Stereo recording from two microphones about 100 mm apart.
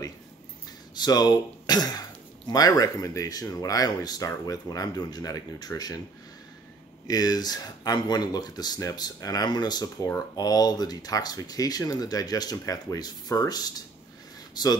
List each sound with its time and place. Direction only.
0.9 s speech: 45° left (ahead or behind)
7.1 s speech: 40° left (ahead or behind)